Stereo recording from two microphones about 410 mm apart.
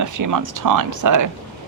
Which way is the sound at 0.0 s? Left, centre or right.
Right.